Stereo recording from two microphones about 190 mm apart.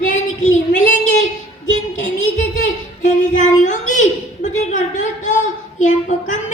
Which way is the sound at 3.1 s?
40° left (ahead or behind).